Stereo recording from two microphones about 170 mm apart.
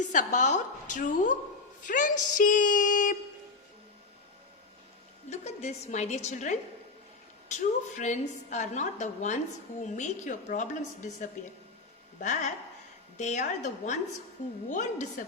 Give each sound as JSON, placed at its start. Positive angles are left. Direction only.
{"t": 0.1, "sound": "a woman's voice", "side_deg": 50}
{"t": 5.3, "sound": "a woman's voice", "side_deg": 40}
{"t": 12.2, "sound": "a woman's voice", "side_deg": 45}